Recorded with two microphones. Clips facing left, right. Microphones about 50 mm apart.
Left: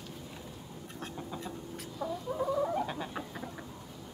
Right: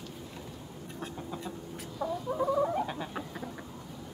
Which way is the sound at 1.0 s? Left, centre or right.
Centre.